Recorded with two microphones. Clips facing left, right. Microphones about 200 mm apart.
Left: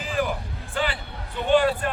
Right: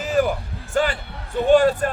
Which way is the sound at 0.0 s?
45° right (ahead or behind).